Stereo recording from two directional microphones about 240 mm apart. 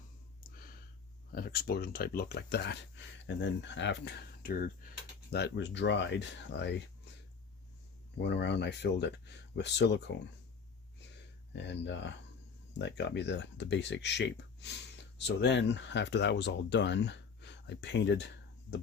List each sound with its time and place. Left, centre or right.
1.3 s speech: left
8.2 s speech: left
11.5 s speech: left